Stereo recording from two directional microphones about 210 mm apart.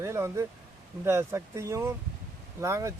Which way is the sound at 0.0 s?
15° right (ahead or behind).